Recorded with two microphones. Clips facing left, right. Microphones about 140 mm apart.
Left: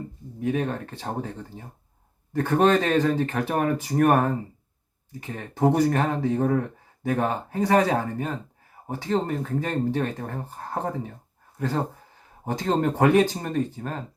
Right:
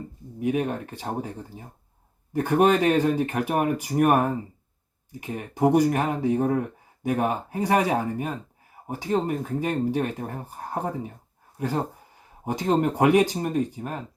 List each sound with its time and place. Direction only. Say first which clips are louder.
0.3 s speech: right 1 dB; 15° right (ahead or behind)